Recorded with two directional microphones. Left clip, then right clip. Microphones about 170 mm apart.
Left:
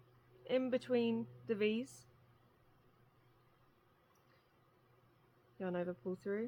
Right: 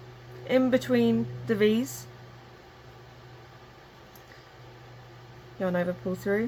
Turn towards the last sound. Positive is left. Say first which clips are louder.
# right 13 dB
turn(degrees=55)  # may be behind; listen again after turning